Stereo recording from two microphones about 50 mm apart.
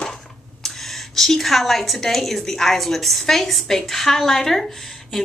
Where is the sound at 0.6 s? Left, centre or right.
Centre.